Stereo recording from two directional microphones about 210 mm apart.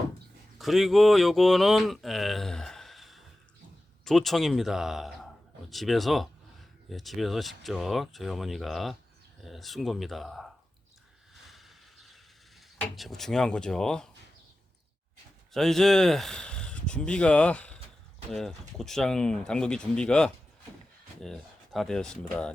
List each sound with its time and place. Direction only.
0.6 s speech: centre (ahead or behind)
11.4 s a sound: centre (ahead or behind)
13.0 s speech: centre (ahead or behind)
15.5 s speech: centre (ahead or behind)